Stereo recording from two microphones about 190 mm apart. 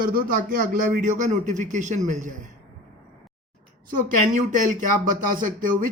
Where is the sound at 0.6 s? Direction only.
45° right (ahead or behind).